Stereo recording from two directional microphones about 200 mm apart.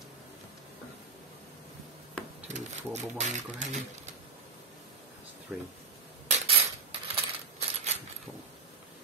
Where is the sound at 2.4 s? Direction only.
35° right (ahead or behind).